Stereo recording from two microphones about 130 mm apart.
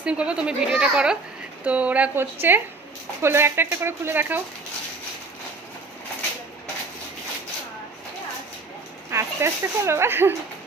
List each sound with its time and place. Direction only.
0.0 s a woman's voice: 10° right (ahead or behind)
9.0 s speech: 20° right (ahead or behind)